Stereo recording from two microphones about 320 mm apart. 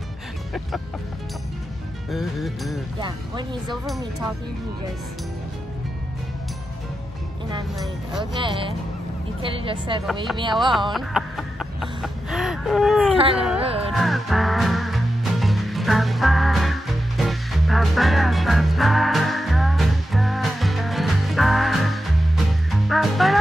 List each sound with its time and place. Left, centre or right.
2.0 s speech: centre
3.0 s speech: centre
3.7 s speech: centre
8.2 s speech: centre
10.9 s a sound: centre
13.1 s cat: centre
13.6 s music: centre
13.9 s music: centre